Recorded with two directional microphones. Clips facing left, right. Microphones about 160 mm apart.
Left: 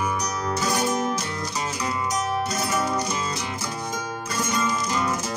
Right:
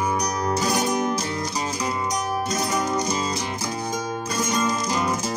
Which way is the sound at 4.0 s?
35° right (ahead or behind).